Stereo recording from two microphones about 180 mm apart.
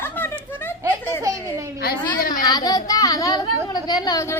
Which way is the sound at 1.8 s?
55° left (ahead or behind).